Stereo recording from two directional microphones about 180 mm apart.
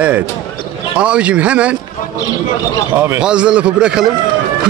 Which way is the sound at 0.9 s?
5° right (ahead or behind).